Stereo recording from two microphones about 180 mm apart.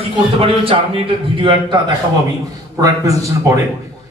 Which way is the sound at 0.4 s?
30° right (ahead or behind).